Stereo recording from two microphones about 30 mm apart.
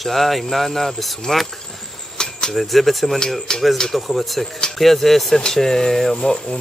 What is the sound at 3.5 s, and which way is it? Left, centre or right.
Speech, left.